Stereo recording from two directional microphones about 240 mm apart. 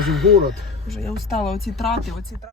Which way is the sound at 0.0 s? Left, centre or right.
Centre.